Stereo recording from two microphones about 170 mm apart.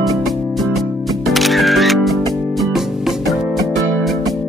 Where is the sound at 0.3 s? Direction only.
Centre (ahead or behind).